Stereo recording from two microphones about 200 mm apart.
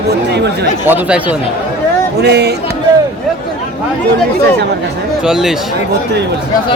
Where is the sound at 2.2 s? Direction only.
55° right (ahead or behind).